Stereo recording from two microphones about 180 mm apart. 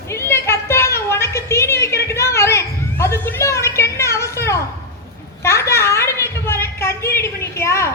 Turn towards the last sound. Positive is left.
turn(degrees=15)  # may be behind; listen again after turning